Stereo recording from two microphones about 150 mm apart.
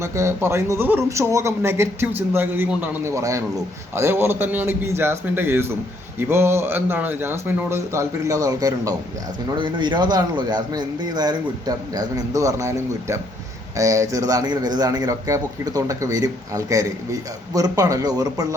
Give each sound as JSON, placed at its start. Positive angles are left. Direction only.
{"t": 0.0, "sound": "a man's voice", "side_deg": -20}